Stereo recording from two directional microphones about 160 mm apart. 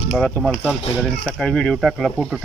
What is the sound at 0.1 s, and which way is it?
Speech, centre (ahead or behind).